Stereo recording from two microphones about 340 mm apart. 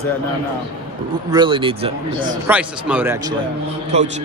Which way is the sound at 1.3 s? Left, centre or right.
Centre.